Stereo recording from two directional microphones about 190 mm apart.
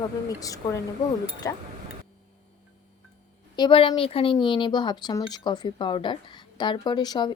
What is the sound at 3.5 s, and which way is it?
Speech, 25° left (ahead or behind).